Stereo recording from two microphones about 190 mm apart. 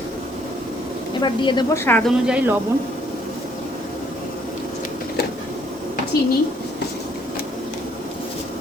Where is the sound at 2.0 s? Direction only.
5° right (ahead or behind).